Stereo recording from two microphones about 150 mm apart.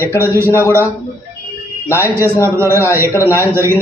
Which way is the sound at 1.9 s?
15° left (ahead or behind).